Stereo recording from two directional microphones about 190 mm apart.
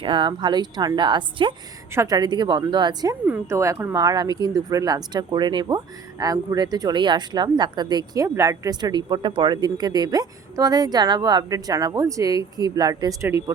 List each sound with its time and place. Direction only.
0.0 s speech: 25° right (ahead or behind)